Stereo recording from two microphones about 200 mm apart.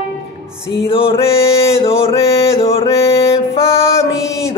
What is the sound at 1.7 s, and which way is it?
Mantra, 30° left (ahead or behind).